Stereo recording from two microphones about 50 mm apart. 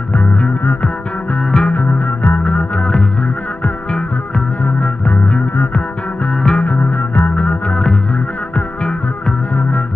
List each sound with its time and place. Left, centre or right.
0.1 s music: left
1.4 s music: centre
1.7 s music: left
4.6 s music: left
6.3 s music: centre
6.6 s music: left
7.3 s music: left
9.6 s music: left